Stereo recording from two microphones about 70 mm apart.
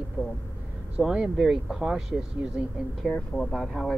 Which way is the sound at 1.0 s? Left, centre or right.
Centre.